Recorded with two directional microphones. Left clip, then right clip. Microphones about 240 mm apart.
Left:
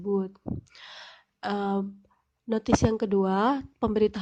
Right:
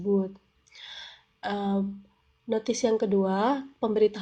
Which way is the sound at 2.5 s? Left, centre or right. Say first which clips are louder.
Even; left.